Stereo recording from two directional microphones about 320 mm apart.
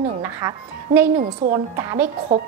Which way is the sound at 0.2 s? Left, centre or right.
Centre.